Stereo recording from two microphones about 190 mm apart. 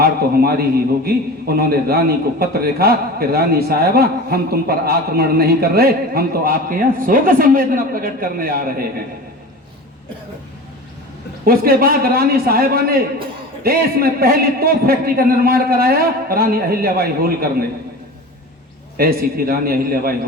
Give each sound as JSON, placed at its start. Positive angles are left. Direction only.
{"t": 0.0, "sound": "a man's voice", "side_deg": -55}
{"t": 11.4, "sound": "a man's voice", "side_deg": -50}
{"t": 18.9, "sound": "a man's voice", "side_deg": -50}